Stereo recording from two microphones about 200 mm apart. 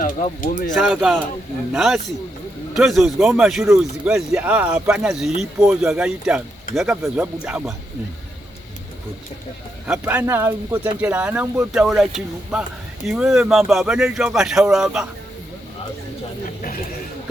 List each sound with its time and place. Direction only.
0.0 s speech: 40° left (ahead or behind)
0.8 s speech: centre (ahead or behind)
9.8 s speech: 10° right (ahead or behind)
13.1 s speech: centre (ahead or behind)